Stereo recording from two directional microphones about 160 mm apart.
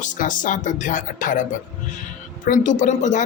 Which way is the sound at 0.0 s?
55° left (ahead or behind).